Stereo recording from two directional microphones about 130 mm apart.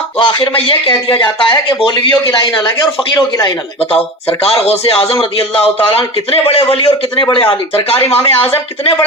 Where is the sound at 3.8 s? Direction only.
50° left (ahead or behind).